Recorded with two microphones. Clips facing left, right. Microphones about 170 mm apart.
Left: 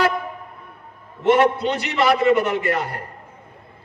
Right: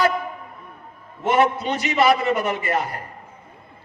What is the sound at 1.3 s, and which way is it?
A man's voice, 65° left (ahead or behind).